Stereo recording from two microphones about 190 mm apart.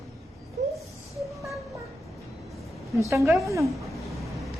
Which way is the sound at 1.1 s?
Centre (ahead or behind).